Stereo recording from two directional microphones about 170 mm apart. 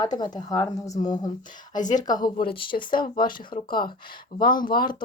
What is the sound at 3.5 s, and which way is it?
Speech, 50° left (ahead or behind).